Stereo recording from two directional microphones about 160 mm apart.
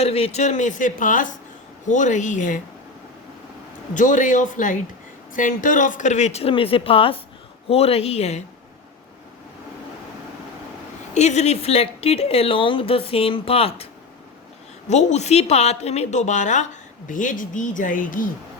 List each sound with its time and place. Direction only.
0.0 s speech: 40° left (ahead or behind)
3.9 s speech: 55° left (ahead or behind)
11.1 s speech: 45° left (ahead or behind)
14.8 s speech: 45° left (ahead or behind)